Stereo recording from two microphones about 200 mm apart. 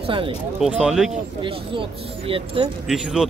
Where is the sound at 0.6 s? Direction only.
5° right (ahead or behind).